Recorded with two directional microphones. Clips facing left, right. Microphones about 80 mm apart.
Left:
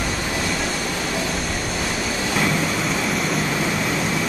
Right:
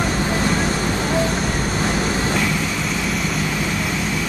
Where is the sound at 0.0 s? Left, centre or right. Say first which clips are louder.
Right 4 dB; right.